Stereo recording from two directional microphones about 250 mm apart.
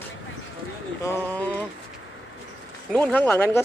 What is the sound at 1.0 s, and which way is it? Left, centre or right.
Speech, centre.